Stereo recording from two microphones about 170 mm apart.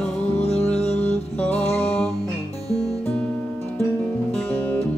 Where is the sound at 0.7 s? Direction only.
5° left (ahead or behind).